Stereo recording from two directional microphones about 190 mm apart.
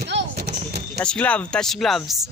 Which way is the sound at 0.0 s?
60° right (ahead or behind).